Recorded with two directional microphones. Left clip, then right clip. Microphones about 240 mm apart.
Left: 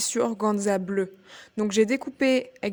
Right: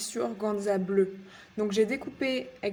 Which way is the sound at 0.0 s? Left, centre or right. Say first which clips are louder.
Left 6 dB; left.